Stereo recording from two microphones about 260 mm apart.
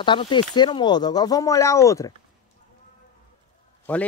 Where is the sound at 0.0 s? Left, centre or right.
Centre.